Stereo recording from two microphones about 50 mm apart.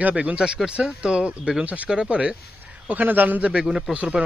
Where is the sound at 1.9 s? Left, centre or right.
Centre.